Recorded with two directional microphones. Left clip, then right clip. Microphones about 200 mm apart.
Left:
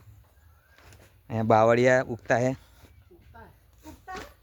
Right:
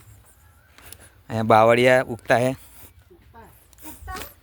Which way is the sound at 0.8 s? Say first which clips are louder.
Right 8 dB; 60° right (ahead or behind).